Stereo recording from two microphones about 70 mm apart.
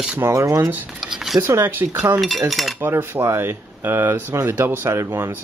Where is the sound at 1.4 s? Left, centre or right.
Right.